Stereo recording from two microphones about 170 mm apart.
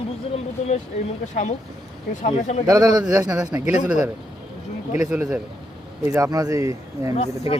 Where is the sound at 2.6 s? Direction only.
20° right (ahead or behind).